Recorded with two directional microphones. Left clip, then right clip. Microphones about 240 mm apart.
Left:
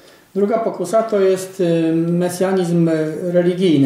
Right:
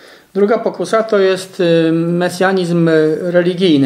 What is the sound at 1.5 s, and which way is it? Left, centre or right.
Speech, right.